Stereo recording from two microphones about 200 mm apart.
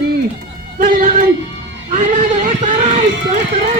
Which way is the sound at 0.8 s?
45° right (ahead or behind).